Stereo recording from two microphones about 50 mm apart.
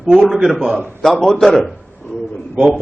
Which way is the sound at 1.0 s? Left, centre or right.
Centre.